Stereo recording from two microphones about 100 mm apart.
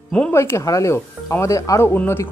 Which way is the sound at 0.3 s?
25° left (ahead or behind).